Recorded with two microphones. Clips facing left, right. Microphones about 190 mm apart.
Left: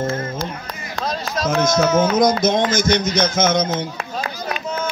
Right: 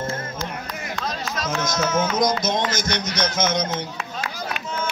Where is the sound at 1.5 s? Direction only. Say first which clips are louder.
Left 7 dB; 55° left (ahead or behind).